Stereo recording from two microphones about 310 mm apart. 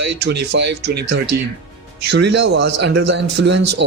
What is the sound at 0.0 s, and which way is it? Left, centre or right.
Speech, right.